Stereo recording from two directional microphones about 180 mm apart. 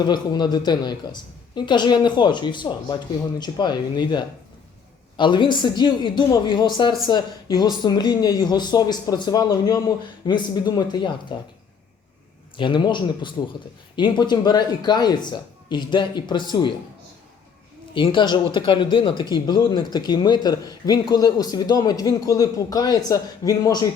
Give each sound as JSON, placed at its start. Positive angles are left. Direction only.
{"t": 0.0, "sound": "a woman's voice", "side_deg": 25}
{"t": 12.5, "sound": "a woman's voice", "side_deg": 25}
{"t": 17.9, "sound": "a woman's voice", "side_deg": 25}